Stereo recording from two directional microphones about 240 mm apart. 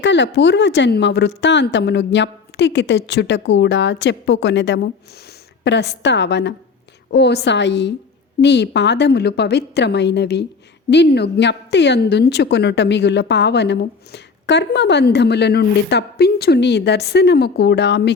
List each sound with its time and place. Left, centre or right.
0.0 s a woman's voice: left